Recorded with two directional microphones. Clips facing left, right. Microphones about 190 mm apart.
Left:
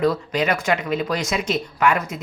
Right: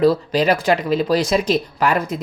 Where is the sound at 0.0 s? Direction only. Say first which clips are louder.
Right 5 dB; 30° right (ahead or behind).